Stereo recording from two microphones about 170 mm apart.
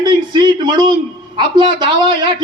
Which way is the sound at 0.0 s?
25° right (ahead or behind).